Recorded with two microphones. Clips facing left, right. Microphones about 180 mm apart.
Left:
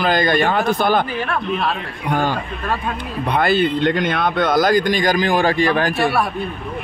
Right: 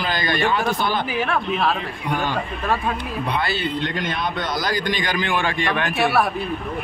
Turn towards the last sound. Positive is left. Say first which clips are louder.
# left 1 dB
turn(degrees=0)  # may be behind; listen again after turning